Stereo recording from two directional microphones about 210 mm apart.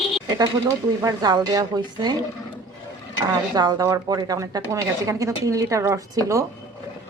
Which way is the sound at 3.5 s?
20° right (ahead or behind).